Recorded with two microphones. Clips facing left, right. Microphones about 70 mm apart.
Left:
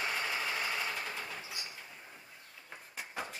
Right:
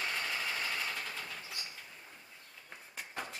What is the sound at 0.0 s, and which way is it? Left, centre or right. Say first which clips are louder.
Vehicle: left 2 dB; centre.